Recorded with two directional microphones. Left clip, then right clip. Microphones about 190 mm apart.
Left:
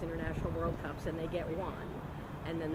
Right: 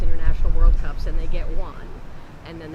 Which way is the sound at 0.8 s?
20° right (ahead or behind).